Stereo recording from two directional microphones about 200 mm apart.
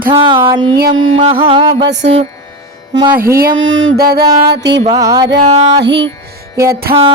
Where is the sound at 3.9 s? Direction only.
50° right (ahead or behind).